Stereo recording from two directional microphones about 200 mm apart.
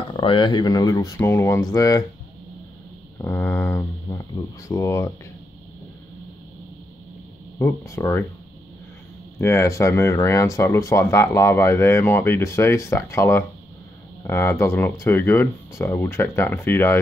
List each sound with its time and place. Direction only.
0.1 s speech: 25° left (ahead or behind)
3.2 s speech: 10° left (ahead or behind)
7.5 s speech: 15° left (ahead or behind)
9.4 s speech: 15° left (ahead or behind)